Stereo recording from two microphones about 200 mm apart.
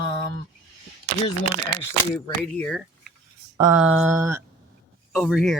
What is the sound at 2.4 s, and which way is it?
Speech, 5° left (ahead or behind).